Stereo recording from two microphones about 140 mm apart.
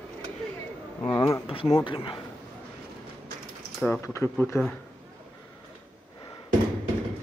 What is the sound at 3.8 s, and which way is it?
Speech, 5° left (ahead or behind).